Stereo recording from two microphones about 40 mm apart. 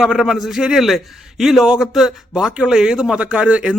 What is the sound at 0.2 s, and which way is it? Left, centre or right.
Speech, centre.